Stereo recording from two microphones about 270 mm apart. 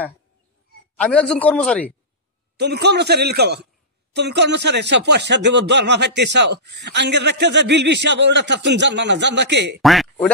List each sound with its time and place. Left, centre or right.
0.9 s a man's voice: centre
2.5 s speech: right
9.8 s speech: centre